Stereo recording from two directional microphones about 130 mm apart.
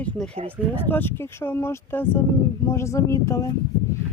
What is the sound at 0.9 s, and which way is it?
Speech, 15° left (ahead or behind).